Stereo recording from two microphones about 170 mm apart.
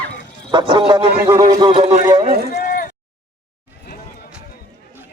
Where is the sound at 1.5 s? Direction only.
30° right (ahead or behind).